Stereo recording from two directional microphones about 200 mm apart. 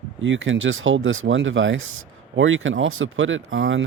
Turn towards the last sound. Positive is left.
turn(degrees=-75)  # may be behind; listen again after turning